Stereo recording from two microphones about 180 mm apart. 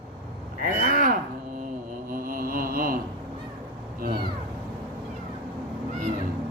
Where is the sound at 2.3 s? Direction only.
50° right (ahead or behind).